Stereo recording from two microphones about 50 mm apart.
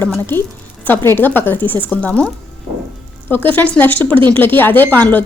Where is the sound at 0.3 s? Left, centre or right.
Left.